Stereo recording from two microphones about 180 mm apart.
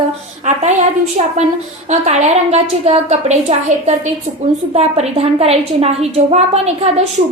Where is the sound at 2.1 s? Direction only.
35° right (ahead or behind).